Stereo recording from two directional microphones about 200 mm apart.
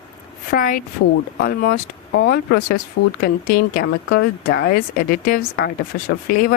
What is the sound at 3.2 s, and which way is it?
Speech, 45° left (ahead or behind).